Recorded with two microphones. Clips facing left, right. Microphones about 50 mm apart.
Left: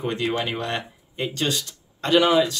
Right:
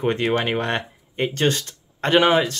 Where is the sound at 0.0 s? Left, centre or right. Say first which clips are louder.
Right 4 dB; right.